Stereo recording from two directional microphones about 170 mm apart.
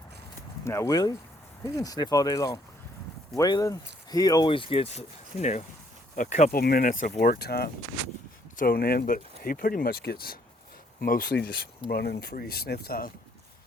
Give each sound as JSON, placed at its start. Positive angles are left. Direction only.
{"t": 0.6, "sound": "speech", "side_deg": 15}
{"t": 6.5, "sound": "speech", "side_deg": 60}
{"t": 7.2, "sound": "speech", "side_deg": 65}